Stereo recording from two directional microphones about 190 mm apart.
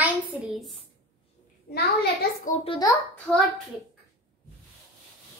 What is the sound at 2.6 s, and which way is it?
Speech, 25° left (ahead or behind).